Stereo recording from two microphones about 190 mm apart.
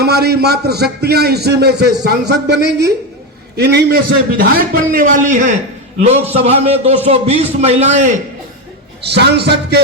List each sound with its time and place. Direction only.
0.0 s a man's voice: 60° right (ahead or behind); by 8.1 s 35° right (ahead or behind)
9.0 s a man's voice: 60° right (ahead or behind)